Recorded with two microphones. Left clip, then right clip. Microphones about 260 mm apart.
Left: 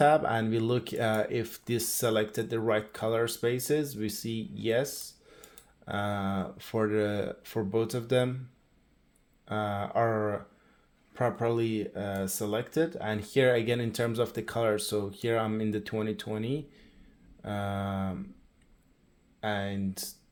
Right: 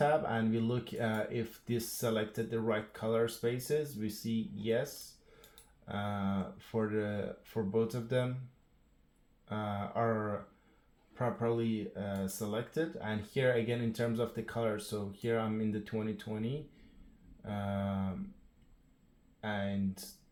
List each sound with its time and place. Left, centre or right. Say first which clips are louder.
0.0 s speech: left 7 dB; left
5.8 s speech: left 6 dB; left
9.5 s speech: left 7 dB; left
19.4 s speech: left 5 dB; left